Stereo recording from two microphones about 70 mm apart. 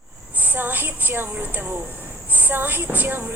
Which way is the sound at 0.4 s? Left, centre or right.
Right.